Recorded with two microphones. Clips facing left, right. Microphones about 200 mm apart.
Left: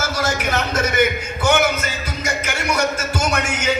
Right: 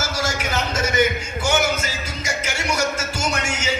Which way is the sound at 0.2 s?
55° left (ahead or behind).